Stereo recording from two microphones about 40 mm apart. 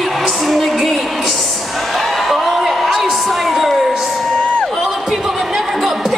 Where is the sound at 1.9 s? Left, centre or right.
Centre.